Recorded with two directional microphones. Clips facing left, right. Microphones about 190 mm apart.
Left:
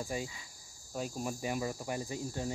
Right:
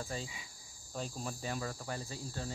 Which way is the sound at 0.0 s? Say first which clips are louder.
Left 4 dB; 15° left (ahead or behind).